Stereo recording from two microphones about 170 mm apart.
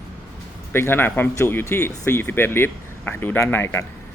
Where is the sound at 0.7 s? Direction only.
15° left (ahead or behind).